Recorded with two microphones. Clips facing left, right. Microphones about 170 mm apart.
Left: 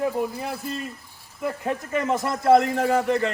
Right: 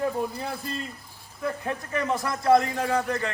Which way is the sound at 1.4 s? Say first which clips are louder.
Left 3 dB; 15° left (ahead or behind).